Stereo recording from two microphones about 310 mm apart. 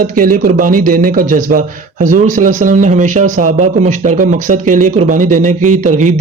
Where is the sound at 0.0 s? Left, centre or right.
Right.